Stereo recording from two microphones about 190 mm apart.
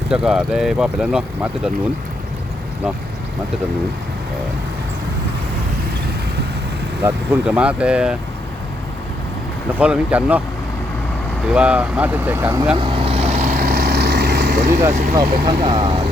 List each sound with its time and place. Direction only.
0.1 s speech: 5° right (ahead or behind)
7.0 s speech: 5° right (ahead or behind)
9.7 s speech: 5° right (ahead or behind)
11.4 s speech: 5° right (ahead or behind)
12.7 s vehicle: 25° right (ahead or behind)
13.6 s vehicle: 55° right (ahead or behind)
14.9 s speech: 45° right (ahead or behind)
15.3 s speech: 25° right (ahead or behind)